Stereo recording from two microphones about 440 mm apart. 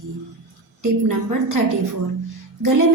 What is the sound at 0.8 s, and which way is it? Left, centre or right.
Speech, right.